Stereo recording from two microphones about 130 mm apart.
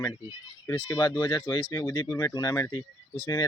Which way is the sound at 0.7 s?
25° left (ahead or behind).